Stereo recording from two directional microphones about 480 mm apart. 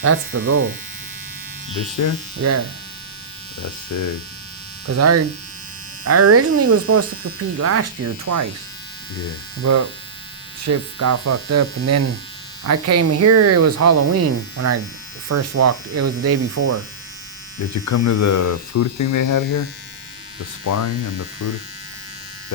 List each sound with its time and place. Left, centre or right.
0.0 s speech: right
2.0 s speech: left
2.4 s speech: right
3.6 s speech: left
4.9 s speech: right
9.6 s speech: right
17.8 s speech: left
20.7 s speech: left